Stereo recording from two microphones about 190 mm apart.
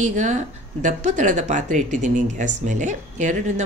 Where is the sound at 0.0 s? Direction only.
40° right (ahead or behind).